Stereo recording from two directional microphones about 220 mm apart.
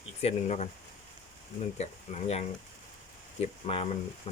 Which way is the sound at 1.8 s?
30° left (ahead or behind).